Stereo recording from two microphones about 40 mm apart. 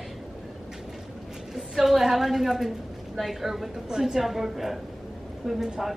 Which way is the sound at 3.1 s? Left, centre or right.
Centre.